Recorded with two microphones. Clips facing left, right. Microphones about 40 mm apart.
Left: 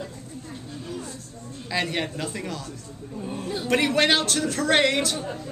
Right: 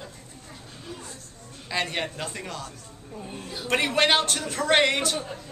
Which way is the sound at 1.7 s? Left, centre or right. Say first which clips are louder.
Left 2 dB; centre.